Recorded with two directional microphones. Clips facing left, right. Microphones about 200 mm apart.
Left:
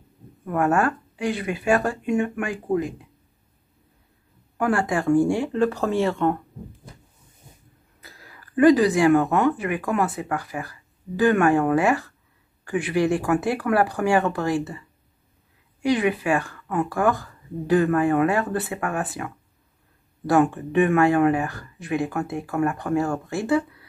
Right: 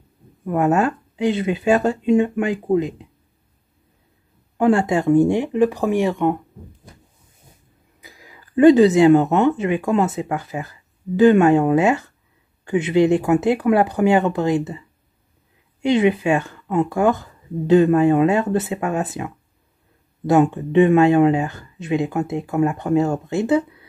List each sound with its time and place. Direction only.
0.5 s speech: 20° right (ahead or behind)
4.6 s speech: 25° right (ahead or behind)
8.0 s speech: 15° right (ahead or behind)